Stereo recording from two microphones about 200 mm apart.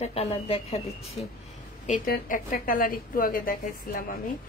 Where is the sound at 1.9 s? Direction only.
45° left (ahead or behind).